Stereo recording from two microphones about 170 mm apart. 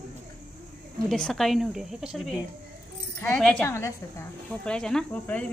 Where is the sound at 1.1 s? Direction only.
5° left (ahead or behind).